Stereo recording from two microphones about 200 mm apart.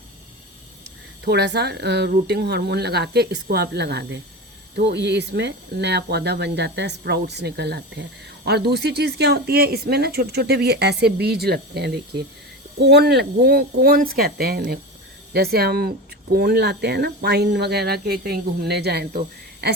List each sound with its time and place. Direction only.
1.2 s speech: 55° right (ahead or behind)